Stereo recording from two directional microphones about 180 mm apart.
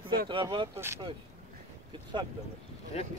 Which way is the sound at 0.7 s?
15° right (ahead or behind).